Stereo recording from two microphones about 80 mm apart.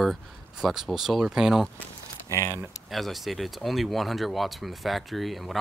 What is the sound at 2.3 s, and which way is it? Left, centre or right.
Speech, left.